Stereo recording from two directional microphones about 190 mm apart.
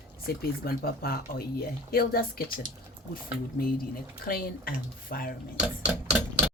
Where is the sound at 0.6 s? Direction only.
50° left (ahead or behind).